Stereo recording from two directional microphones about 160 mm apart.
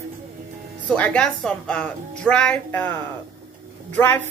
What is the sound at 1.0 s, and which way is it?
Speech, 5° left (ahead or behind).